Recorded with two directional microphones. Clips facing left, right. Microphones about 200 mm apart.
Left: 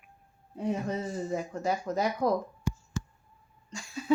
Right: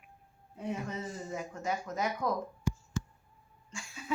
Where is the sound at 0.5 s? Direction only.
35° left (ahead or behind).